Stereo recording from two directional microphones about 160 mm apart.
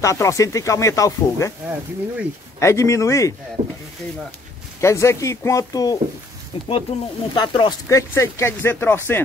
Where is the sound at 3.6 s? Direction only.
45° right (ahead or behind).